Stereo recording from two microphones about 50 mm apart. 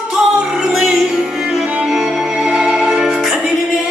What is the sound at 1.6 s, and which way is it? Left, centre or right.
Music, right.